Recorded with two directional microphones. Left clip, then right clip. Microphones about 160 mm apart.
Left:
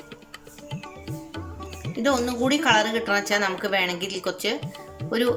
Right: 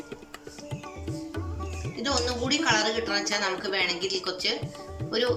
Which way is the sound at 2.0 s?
60° left (ahead or behind).